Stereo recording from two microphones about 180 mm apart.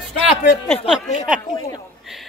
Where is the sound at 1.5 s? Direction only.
20° left (ahead or behind).